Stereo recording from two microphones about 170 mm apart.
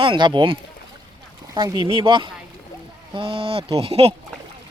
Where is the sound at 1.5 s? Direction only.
25° right (ahead or behind).